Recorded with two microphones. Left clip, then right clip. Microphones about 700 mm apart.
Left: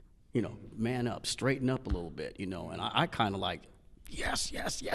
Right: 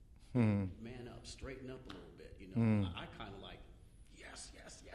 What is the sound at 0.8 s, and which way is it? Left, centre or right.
Speech, left.